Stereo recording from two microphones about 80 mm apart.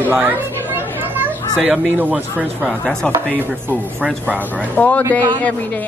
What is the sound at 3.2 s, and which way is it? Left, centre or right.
A woman's voice, centre.